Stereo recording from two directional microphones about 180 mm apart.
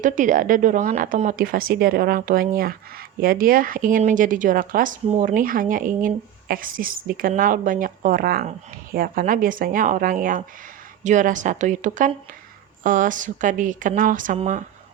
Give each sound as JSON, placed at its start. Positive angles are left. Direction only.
{"t": 0.0, "sound": "speech", "side_deg": -45}